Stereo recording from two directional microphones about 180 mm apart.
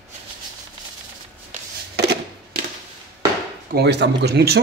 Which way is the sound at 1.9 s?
65° right (ahead or behind).